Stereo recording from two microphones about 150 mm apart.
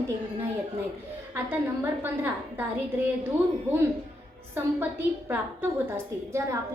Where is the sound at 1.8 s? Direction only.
15° right (ahead or behind).